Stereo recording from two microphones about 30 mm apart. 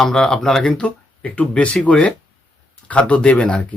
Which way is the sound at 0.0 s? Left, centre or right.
Centre.